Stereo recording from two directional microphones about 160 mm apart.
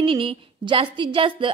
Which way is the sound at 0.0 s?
35° right (ahead or behind).